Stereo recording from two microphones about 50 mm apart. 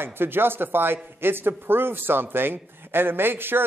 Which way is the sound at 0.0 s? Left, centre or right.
Right.